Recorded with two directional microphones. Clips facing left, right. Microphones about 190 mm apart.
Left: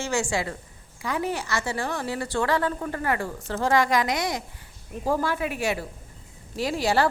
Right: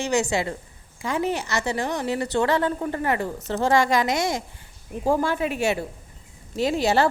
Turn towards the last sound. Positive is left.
turn(degrees=-20)  # may be behind; listen again after turning